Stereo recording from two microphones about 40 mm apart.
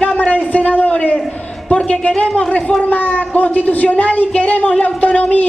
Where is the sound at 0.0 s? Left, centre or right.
Left.